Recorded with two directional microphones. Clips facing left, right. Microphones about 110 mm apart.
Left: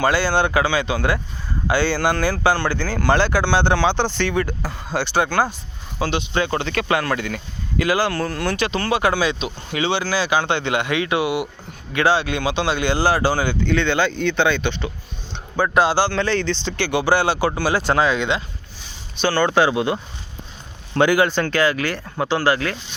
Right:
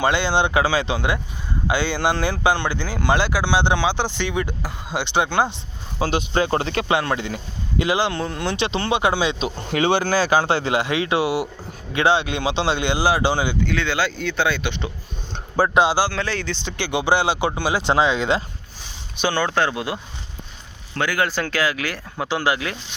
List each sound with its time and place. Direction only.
0.0 s speech: 20° right (ahead or behind)
6.0 s speech: 35° right (ahead or behind)
9.4 s speech: 45° right (ahead or behind); by 13.6 s 15° right (ahead or behind)
13.7 s speech: 5° right (ahead or behind)
19.4 s speech: 5° left (ahead or behind)
20.9 s speech: 25° left (ahead or behind)
21.2 s speech: 5° right (ahead or behind)